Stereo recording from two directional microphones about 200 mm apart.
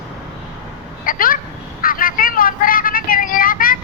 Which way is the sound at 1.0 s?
45° left (ahead or behind).